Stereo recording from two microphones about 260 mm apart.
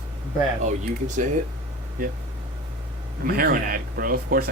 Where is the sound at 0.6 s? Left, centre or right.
Right.